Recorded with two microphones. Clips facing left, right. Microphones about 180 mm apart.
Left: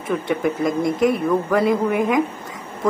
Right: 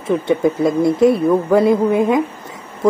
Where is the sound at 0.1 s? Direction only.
30° right (ahead or behind).